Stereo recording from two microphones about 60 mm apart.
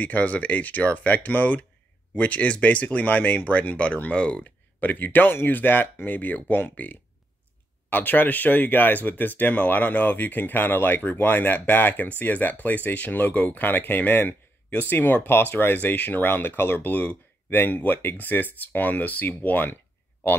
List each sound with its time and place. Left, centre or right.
0.0 s speech: left